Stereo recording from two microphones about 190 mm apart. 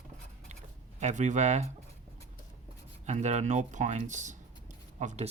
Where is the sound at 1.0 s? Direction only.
40° right (ahead or behind).